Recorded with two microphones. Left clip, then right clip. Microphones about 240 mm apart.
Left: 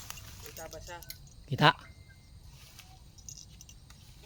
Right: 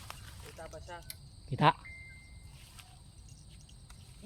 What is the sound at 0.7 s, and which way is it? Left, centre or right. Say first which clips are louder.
Keys jangling: left 1 dB; left.